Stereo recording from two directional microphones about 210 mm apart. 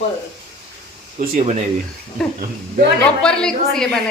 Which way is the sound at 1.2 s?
40° right (ahead or behind).